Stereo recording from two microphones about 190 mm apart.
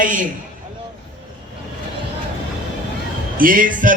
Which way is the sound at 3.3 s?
45° right (ahead or behind).